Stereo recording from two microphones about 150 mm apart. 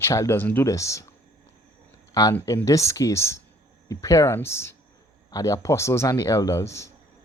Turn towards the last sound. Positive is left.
turn(degrees=20)  # may be behind; listen again after turning